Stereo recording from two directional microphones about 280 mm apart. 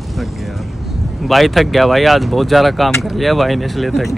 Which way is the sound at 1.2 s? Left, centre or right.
Centre.